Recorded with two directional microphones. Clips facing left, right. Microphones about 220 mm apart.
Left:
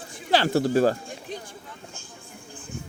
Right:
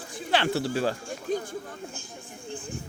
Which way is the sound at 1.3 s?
50° right (ahead or behind).